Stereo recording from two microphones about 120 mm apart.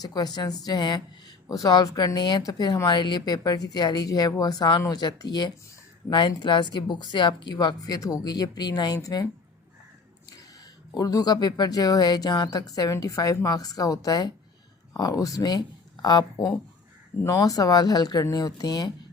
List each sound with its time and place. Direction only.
0.0 s speech: 35° left (ahead or behind)
10.9 s speech: 30° left (ahead or behind)